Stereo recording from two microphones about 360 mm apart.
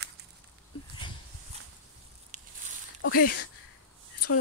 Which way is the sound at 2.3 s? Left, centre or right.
Right.